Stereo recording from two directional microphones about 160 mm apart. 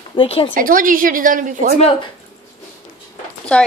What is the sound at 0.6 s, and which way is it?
Speech, 60° right (ahead or behind).